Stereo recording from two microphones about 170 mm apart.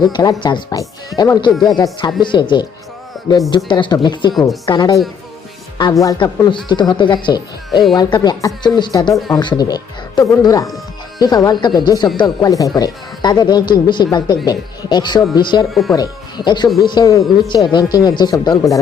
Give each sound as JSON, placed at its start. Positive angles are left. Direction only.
{"t": 0.1, "sound": "speech", "side_deg": 25}
{"t": 3.7, "sound": "speech", "side_deg": 25}